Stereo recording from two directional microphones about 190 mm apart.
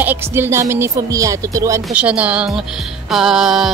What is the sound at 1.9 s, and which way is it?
Speech, 5° right (ahead or behind).